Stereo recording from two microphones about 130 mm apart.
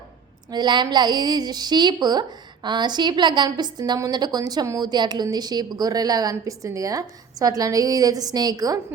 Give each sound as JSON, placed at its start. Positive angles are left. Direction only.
{"t": 0.5, "sound": "a woman's voice", "side_deg": -35}